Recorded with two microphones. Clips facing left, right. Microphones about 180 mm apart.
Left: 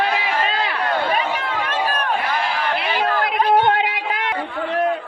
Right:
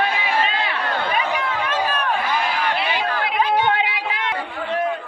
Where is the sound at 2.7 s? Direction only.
50° left (ahead or behind).